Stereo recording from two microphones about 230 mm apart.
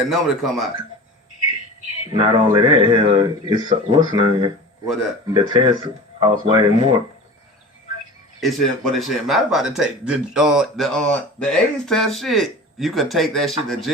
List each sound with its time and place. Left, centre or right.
0.1 s speech: centre
2.1 s speech: right
8.4 s speech: centre